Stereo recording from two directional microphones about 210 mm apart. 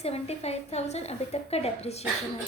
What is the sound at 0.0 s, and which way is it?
A woman's voice, 30° left (ahead or behind).